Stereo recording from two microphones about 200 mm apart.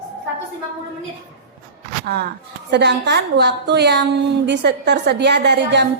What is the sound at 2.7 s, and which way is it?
A woman's voice, 60° right (ahead or behind).